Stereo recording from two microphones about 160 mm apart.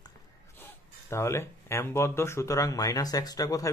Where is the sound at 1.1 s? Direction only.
15° left (ahead or behind).